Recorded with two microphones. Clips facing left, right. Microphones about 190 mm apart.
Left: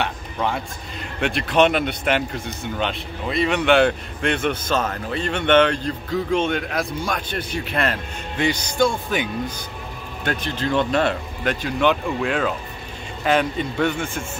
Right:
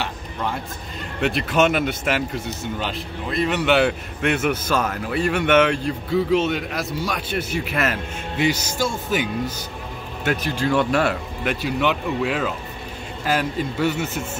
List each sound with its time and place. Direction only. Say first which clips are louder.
1.2 s speech: left 1 dB; centre (ahead or behind)
4.6 s speech: even; 25° left (ahead or behind)
5.1 s speech: even; 10° right (ahead or behind)